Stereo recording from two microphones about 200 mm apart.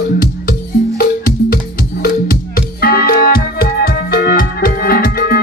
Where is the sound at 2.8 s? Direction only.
50° left (ahead or behind).